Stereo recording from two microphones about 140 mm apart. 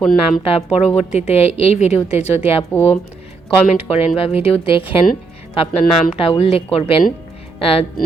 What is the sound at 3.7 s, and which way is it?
Speech, 45° left (ahead or behind).